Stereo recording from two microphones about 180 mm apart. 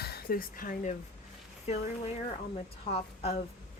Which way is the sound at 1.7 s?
35° left (ahead or behind).